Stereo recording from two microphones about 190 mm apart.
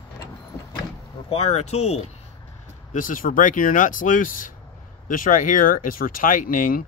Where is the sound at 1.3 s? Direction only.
35° left (ahead or behind).